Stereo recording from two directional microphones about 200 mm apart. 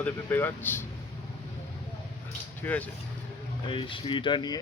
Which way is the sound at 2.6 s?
10° left (ahead or behind).